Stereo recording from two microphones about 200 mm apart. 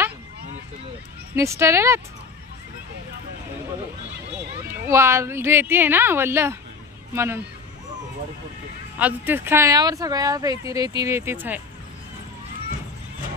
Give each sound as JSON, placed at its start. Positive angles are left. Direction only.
{"t": 1.3, "sound": "speech", "side_deg": -15}
{"t": 4.6, "sound": "speech", "side_deg": -10}
{"t": 8.9, "sound": "speech", "side_deg": -10}